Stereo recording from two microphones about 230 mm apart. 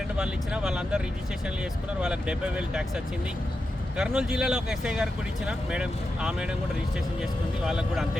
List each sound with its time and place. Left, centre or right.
0.2 s speech: centre